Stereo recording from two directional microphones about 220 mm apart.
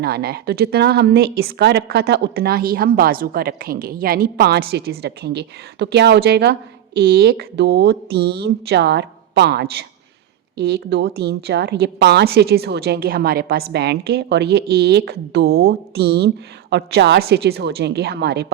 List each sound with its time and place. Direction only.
0.0 s a woman's voice: 45° right (ahead or behind)